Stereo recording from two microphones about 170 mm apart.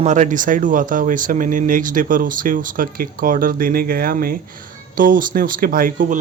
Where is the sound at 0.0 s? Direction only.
45° right (ahead or behind).